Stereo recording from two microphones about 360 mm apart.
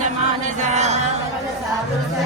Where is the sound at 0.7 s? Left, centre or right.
Centre.